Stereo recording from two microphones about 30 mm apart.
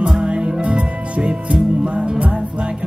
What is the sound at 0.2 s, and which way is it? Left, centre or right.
Music, right.